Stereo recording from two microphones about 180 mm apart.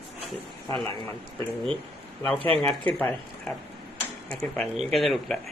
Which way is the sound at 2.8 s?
10° left (ahead or behind).